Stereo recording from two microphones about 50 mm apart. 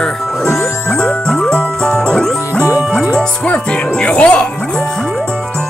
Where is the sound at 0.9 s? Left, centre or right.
Centre.